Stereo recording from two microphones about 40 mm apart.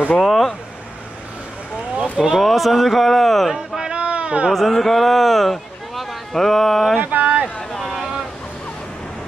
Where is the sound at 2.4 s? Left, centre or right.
Centre.